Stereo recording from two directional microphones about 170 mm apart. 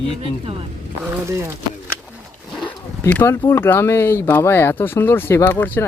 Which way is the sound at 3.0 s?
15° left (ahead or behind).